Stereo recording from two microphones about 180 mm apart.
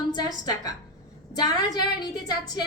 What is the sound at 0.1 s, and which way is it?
Speech, 20° left (ahead or behind).